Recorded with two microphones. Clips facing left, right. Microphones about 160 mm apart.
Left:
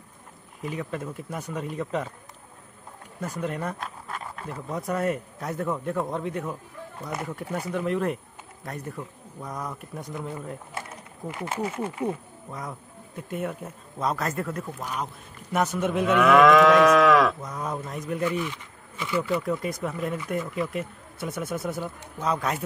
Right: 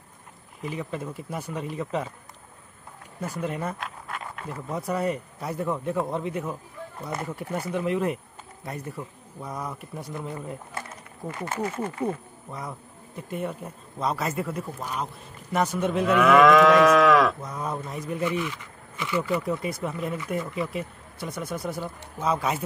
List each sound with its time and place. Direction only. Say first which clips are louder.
0.6 s speech: even; centre (ahead or behind)
3.2 s speech: even; centre (ahead or behind)
11.2 s speech: even; 15° left (ahead or behind); by 18.3 s centre (ahead or behind)
19.4 s speech: even; 5° right (ahead or behind)